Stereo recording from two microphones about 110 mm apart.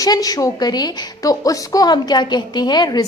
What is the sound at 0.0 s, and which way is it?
A woman's voice, 35° left (ahead or behind).